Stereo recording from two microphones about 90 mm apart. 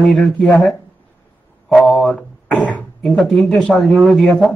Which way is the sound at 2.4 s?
15° left (ahead or behind).